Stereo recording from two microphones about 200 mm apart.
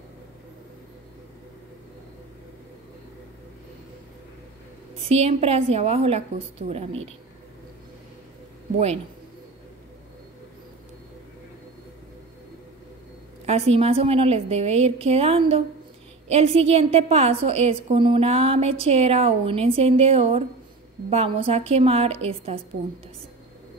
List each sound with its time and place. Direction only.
5.0 s a woman's voice: 30° right (ahead or behind)
13.5 s a woman's voice: 30° right (ahead or behind)